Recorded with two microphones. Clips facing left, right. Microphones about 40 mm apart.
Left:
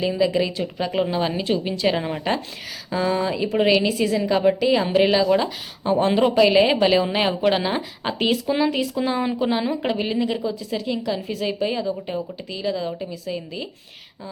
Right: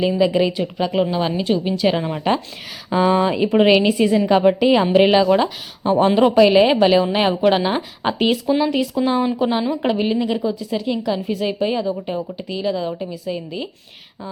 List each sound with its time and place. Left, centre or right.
0.2 s a woman's voice: centre
0.8 s speech: centre
2.9 s a woman's voice: right; by 8.4 s centre
8.4 s a woman's voice: centre